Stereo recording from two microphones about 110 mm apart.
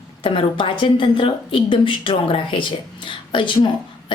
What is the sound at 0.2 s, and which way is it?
A woman's voice, 50° left (ahead or behind).